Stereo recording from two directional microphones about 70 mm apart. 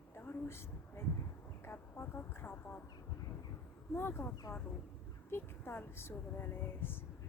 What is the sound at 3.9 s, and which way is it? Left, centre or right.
Speech, left.